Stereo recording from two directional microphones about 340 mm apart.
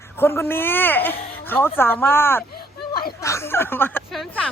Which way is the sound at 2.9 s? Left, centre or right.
Left.